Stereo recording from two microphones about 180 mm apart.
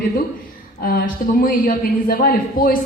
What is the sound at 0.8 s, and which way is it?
A woman's voice, 55° left (ahead or behind).